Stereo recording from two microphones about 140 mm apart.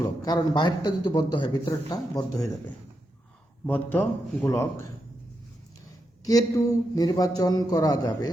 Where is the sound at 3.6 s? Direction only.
10° left (ahead or behind).